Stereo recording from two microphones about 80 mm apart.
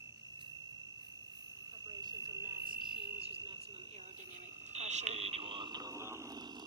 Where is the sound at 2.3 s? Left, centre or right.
Right.